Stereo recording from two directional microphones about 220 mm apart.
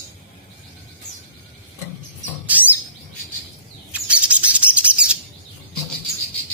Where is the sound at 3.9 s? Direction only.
5° right (ahead or behind).